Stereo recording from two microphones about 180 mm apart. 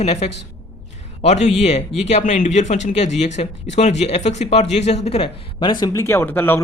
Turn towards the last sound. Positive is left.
turn(degrees=10)  # may be behind; listen again after turning